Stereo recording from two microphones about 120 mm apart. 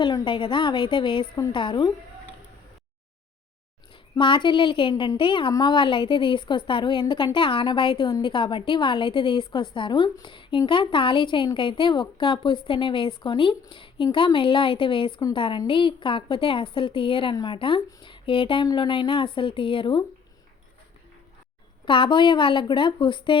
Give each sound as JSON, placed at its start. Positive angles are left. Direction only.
{"t": 0.0, "sound": "a woman's voice", "side_deg": 45}
{"t": 4.2, "sound": "a woman's voice", "side_deg": 45}
{"t": 18.6, "sound": "a woman's voice", "side_deg": 35}
{"t": 21.8, "sound": "a woman's voice", "side_deg": 45}